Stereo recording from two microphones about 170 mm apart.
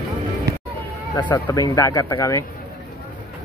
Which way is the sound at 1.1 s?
20° left (ahead or behind).